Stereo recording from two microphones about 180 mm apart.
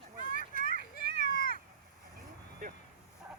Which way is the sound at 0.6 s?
50° left (ahead or behind).